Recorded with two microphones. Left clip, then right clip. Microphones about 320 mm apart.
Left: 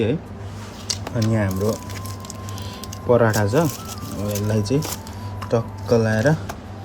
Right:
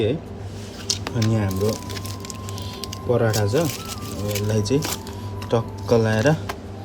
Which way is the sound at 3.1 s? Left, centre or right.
Centre.